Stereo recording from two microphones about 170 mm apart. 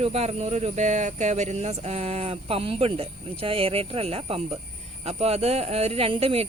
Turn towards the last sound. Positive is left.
turn(degrees=-35)  # may be behind; listen again after turning